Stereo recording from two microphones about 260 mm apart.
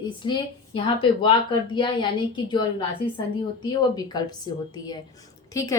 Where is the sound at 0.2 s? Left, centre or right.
Centre.